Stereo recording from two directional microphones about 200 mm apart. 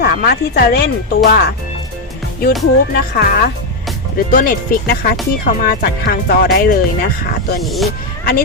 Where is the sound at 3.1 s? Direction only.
50° left (ahead or behind).